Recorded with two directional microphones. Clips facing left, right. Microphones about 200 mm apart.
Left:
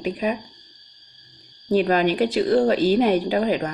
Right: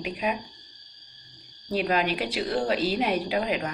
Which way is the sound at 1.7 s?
45° left (ahead or behind).